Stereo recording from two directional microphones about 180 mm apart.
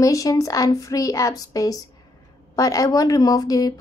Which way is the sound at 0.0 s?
20° left (ahead or behind).